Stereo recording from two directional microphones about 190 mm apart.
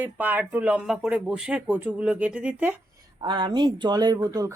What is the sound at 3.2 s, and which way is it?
Speech, 25° right (ahead or behind).